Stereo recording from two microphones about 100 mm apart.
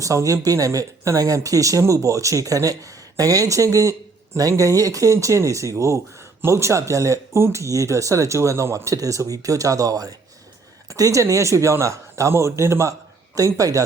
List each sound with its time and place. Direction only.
0.0 s speech: 35° right (ahead or behind)